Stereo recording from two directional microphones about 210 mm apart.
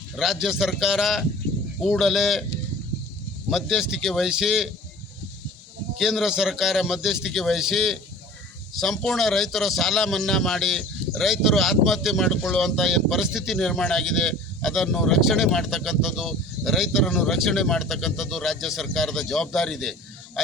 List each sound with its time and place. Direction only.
0.2 s a man's voice: centre (ahead or behind)
3.5 s a man's voice: centre (ahead or behind)
6.0 s a man's voice: centre (ahead or behind)